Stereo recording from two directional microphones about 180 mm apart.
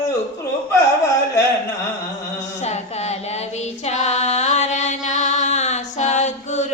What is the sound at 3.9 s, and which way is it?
Mantra, 40° left (ahead or behind).